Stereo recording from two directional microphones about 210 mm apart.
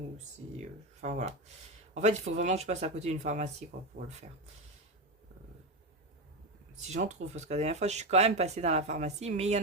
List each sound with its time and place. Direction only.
0.6 s speech: 35° right (ahead or behind)
3.9 s speech: 55° right (ahead or behind)
6.9 s speech: 35° right (ahead or behind)